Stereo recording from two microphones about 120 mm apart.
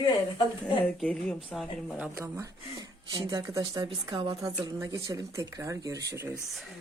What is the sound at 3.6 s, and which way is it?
Speech, 45° right (ahead or behind).